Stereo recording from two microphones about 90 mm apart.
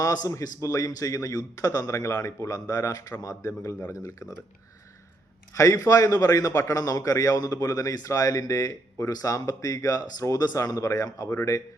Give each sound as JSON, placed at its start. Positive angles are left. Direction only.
{"t": 0.0, "sound": "a man's voice", "side_deg": 35}
{"t": 5.5, "sound": "a man's voice", "side_deg": 35}